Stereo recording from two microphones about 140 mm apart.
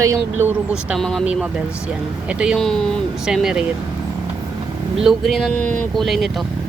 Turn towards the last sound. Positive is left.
turn(degrees=0)  # may be behind; listen again after turning